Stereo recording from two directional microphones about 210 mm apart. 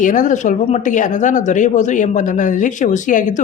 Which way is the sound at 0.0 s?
35° left (ahead or behind).